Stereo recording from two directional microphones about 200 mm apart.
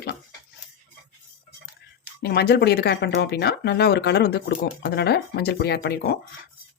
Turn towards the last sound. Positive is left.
turn(degrees=55)  # may be behind; listen again after turning